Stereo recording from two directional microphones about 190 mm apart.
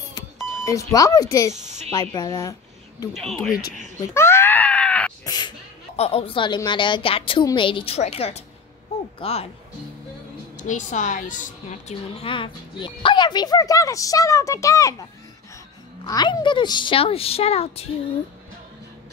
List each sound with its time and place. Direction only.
0.7 s speech: 15° left (ahead or behind)
1.5 s speech: 35° right (ahead or behind)
1.9 s speech: 15° left (ahead or behind)
3.1 s speech: centre (ahead or behind)
4.1 s screaming: 15° left (ahead or behind)
5.2 s sneeze: 20° left (ahead or behind)
5.9 s a woman's voice: 30° left (ahead or behind)
10.6 s a woman's voice: 40° left (ahead or behind); by 15.0 s 15° left (ahead or behind)
16.1 s a woman's voice: 20° left (ahead or behind)